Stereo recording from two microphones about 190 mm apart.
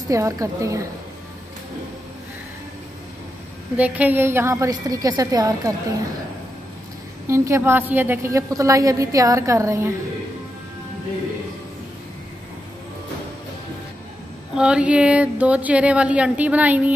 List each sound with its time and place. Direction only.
0.1 s a woman's voice: 15° right (ahead or behind)
3.7 s a woman's voice: 10° right (ahead or behind)
7.2 s a woman's voice: 15° right (ahead or behind)
14.5 s a woman's voice: 5° right (ahead or behind)